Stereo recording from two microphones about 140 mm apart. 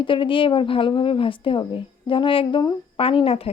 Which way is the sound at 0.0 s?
35° left (ahead or behind).